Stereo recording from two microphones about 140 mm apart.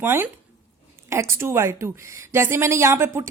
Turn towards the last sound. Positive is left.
turn(degrees=-20)  # may be behind; listen again after turning